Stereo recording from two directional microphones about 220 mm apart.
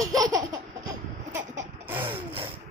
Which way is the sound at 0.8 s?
10° right (ahead or behind).